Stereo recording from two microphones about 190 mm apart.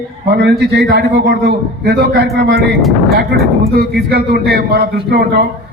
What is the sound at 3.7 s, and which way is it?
A man's voice, 55° right (ahead or behind).